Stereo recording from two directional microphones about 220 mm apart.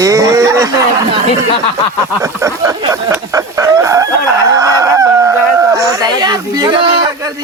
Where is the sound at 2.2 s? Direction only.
15° right (ahead or behind).